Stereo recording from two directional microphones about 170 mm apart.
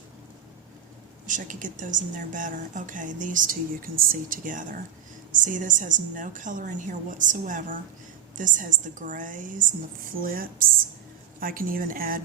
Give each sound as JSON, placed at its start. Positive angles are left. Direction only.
{"t": 1.3, "sound": "a woman's voice", "side_deg": -50}